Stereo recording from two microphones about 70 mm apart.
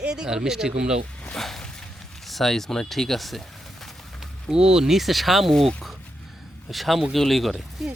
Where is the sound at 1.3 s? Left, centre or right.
Centre.